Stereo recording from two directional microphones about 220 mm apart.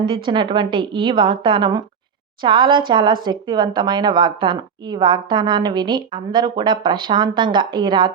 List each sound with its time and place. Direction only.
0.0 s speech: 20° right (ahead or behind)